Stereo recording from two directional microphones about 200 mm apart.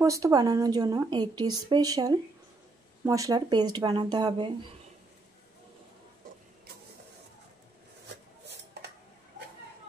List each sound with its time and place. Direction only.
0.0 s speech: 15° right (ahead or behind)